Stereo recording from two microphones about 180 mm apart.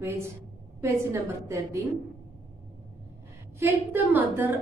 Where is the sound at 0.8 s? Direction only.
15° right (ahead or behind).